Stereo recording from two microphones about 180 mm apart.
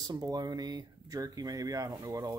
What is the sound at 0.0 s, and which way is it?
Speech, 20° right (ahead or behind).